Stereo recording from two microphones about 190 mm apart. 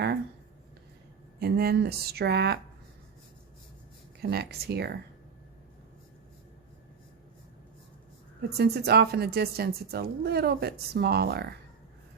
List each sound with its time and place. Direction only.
1.4 s speech: 55° right (ahead or behind)
4.2 s speech: 55° right (ahead or behind)
8.4 s speech: 60° right (ahead or behind)